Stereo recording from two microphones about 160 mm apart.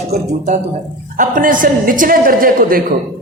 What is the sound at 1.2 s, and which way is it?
A man's voice, 55° right (ahead or behind).